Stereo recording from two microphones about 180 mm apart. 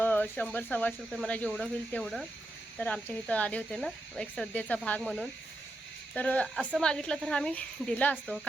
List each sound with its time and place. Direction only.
0.0 s speech: 10° left (ahead or behind)
6.6 s a woman's voice: 10° right (ahead or behind)
6.8 s speech: 5° left (ahead or behind)